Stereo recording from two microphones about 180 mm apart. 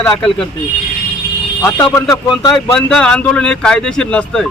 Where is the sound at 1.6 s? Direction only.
15° left (ahead or behind).